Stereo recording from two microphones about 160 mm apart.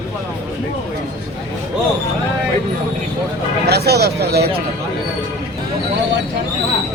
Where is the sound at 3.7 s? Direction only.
90° right.